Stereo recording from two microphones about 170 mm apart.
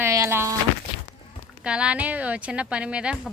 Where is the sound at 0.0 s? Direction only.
15° right (ahead or behind).